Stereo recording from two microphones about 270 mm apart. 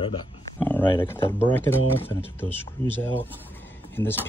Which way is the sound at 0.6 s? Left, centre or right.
Centre.